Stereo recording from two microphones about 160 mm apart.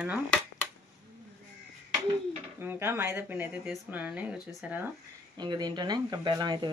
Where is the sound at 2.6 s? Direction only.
15° right (ahead or behind).